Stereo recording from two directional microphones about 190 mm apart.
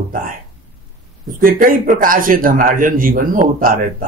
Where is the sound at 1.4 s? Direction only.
50° right (ahead or behind).